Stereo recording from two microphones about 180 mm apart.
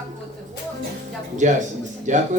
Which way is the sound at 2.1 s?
45° right (ahead or behind).